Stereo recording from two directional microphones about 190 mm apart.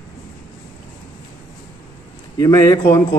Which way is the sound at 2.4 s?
20° left (ahead or behind).